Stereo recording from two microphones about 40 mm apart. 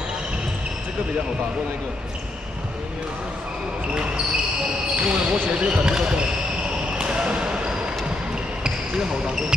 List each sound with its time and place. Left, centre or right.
5.0 s speech: right
7.0 s a sound: right
8.6 s speech: centre